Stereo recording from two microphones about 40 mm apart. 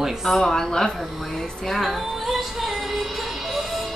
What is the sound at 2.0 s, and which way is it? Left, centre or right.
Music, centre.